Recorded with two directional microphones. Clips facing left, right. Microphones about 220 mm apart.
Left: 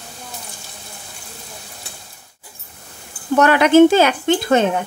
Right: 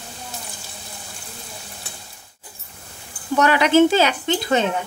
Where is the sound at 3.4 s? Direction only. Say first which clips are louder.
Left 4 dB; 50° left (ahead or behind).